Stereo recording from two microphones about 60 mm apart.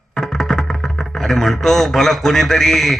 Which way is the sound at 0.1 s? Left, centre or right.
Centre.